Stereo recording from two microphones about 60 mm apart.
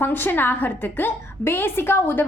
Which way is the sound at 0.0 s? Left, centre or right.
Left.